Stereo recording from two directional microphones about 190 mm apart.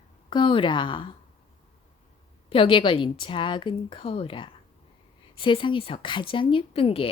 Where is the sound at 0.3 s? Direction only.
25° left (ahead or behind).